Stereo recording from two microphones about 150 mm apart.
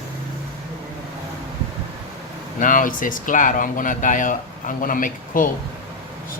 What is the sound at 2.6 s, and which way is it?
Speech, 65° left (ahead or behind).